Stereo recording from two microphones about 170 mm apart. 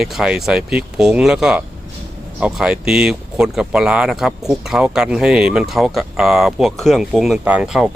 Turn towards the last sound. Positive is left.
turn(degrees=-5)  # may be behind; listen again after turning